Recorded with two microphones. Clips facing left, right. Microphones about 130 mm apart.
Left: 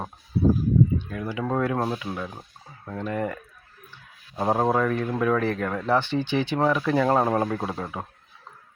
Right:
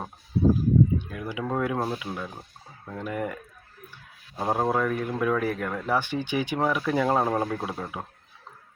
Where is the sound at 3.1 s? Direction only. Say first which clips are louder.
Left 2 dB; 15° right (ahead or behind).